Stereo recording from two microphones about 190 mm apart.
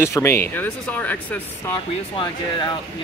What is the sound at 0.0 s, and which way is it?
Speech, 15° left (ahead or behind).